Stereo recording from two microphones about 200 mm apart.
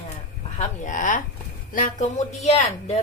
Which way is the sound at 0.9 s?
40° left (ahead or behind).